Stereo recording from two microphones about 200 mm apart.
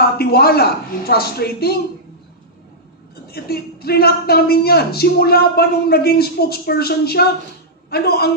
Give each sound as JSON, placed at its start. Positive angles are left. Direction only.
{"t": 0.0, "sound": "a man's voice", "side_deg": 50}
{"t": 3.3, "sound": "a man's voice", "side_deg": 50}